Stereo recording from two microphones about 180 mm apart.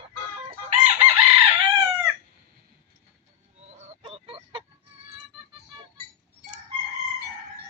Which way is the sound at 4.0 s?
35° right (ahead or behind).